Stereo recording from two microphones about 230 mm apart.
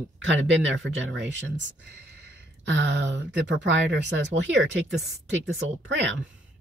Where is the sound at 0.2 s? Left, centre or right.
Right.